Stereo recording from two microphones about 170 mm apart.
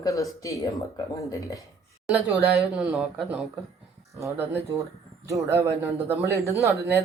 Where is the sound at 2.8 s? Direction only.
5° right (ahead or behind).